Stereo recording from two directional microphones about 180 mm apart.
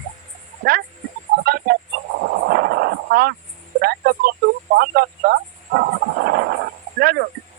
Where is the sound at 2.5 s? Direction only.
60° right (ahead or behind).